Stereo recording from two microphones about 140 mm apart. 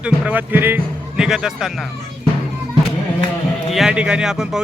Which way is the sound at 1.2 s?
5° right (ahead or behind).